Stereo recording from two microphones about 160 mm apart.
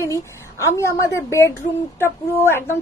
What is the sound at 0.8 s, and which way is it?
A woman's voice, 15° left (ahead or behind).